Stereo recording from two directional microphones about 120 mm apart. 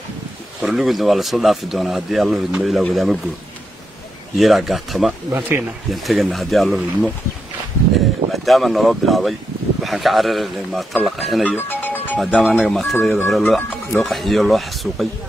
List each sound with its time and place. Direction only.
0.6 s speech: 5° right (ahead or behind)
4.4 s speech: centre (ahead or behind)
5.3 s speech: 15° right (ahead or behind)
5.9 s speech: centre (ahead or behind)
8.3 s speech: centre (ahead or behind)
11.5 s music: 15° left (ahead or behind)
12.2 s speech: centre (ahead or behind)